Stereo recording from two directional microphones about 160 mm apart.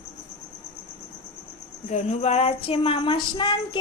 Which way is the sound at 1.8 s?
45° left (ahead or behind).